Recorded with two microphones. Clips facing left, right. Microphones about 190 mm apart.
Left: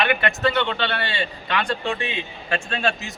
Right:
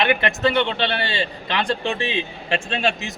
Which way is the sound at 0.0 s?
25° right (ahead or behind).